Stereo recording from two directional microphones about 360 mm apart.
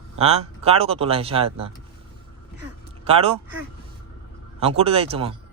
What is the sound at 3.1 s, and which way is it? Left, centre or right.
Speech, centre.